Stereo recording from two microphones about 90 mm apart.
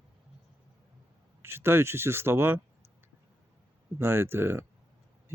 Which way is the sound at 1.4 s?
25° right (ahead or behind).